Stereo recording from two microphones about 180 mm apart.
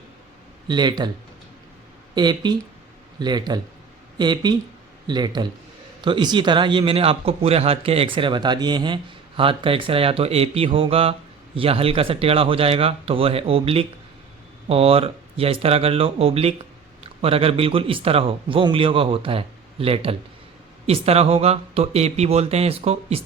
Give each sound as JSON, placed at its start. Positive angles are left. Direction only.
{"t": 0.7, "sound": "speech", "side_deg": -25}
{"t": 2.1, "sound": "a man's voice", "side_deg": -25}